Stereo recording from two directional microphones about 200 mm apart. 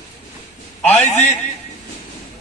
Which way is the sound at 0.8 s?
10° left (ahead or behind).